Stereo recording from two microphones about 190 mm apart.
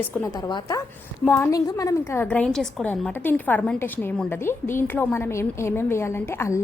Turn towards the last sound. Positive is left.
turn(degrees=15)  # may be behind; listen again after turning